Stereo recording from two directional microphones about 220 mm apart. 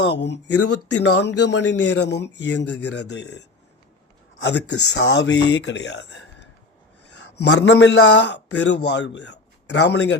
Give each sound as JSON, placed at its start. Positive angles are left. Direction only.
{"t": 0.0, "sound": "a man's voice", "side_deg": 50}
{"t": 0.5, "sound": "speech", "side_deg": 90}
{"t": 1.2, "sound": "a man's voice", "side_deg": 50}
{"t": 4.4, "sound": "a man's voice", "side_deg": 50}